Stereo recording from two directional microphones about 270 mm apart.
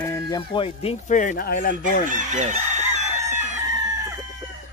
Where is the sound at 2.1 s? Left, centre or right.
Right.